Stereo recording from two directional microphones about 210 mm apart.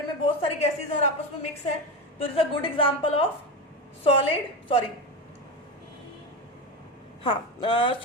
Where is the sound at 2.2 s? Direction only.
25° left (ahead or behind).